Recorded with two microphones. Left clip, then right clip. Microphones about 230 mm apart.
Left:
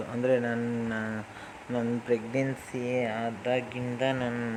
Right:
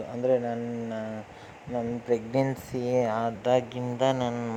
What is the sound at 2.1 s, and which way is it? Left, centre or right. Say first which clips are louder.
Speech: right 4 dB; centre.